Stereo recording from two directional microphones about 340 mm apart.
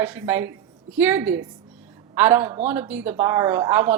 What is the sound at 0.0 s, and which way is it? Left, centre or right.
A woman's voice, centre.